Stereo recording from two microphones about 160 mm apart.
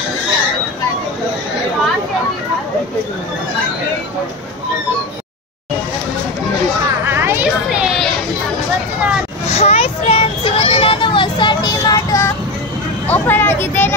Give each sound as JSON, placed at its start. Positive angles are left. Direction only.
{"t": 7.2, "sound": "a sound", "side_deg": -15}
{"t": 9.5, "sound": "child singing", "side_deg": 40}
{"t": 13.1, "sound": "vehicle", "side_deg": 15}